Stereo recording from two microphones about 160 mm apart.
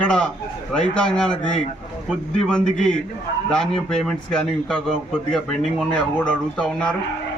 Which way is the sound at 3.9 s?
5° left (ahead or behind).